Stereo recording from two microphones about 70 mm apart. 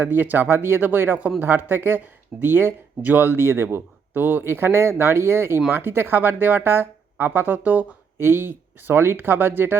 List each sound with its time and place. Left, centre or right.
0.0 s speech: right